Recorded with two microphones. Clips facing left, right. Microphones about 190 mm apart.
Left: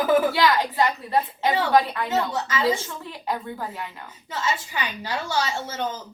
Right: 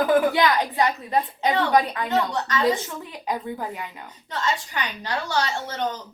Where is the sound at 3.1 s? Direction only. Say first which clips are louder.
Even; 15° right (ahead or behind).